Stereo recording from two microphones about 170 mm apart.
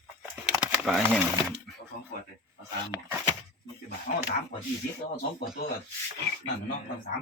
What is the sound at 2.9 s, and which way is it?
Speech, 20° right (ahead or behind).